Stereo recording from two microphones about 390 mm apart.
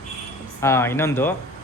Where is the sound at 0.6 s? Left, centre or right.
Centre.